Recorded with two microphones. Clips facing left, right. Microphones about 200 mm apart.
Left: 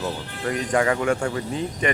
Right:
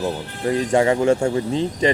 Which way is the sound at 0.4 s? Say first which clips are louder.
Right 5 dB; 25° right (ahead or behind).